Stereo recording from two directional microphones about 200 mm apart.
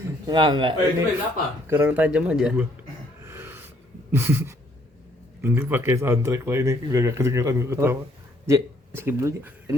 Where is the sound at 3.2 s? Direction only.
10° right (ahead or behind).